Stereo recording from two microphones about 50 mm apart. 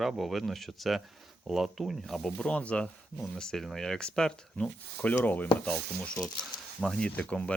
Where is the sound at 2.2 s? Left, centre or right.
Centre.